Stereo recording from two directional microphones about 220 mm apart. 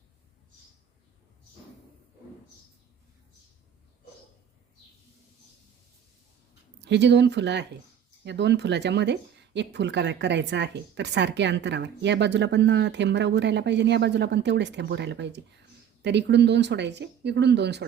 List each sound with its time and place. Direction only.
6.7 s speech: 50° right (ahead or behind)